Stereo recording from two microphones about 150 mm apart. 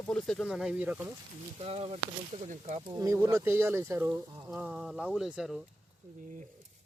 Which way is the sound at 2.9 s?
20° right (ahead or behind).